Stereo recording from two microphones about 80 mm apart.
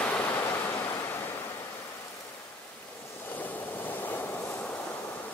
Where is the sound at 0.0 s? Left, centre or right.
Centre.